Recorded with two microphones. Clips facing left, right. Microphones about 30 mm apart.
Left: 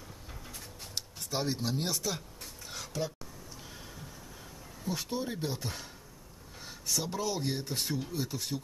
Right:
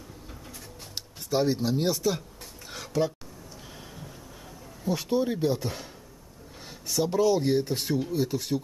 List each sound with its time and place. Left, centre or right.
0.9 s speech: centre
2.7 s a sound: centre
4.8 s speech: centre
6.9 s speech: centre